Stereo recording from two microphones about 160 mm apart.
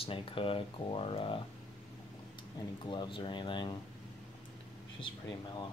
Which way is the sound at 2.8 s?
30° left (ahead or behind).